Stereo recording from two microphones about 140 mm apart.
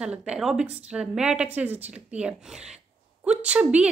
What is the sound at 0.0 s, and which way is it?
A woman's voice, 5° right (ahead or behind).